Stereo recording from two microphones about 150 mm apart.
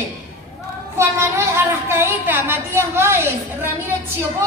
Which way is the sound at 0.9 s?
20° right (ahead or behind).